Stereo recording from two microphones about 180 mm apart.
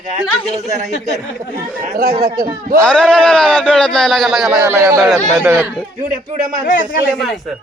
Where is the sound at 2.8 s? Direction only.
5° left (ahead or behind).